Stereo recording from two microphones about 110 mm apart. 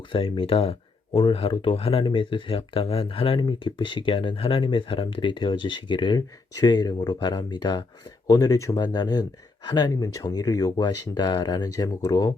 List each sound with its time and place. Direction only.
0.1 s speech: 50° left (ahead or behind); by 12.3 s 35° left (ahead or behind)